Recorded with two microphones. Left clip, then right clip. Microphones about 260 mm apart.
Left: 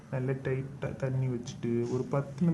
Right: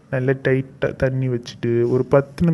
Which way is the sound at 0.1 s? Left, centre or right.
Right.